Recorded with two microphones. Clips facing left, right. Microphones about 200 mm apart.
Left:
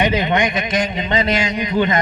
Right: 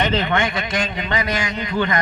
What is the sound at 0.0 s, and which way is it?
A man's voice, 15° left (ahead or behind).